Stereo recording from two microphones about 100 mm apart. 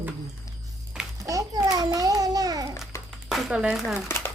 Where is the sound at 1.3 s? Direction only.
35° right (ahead or behind).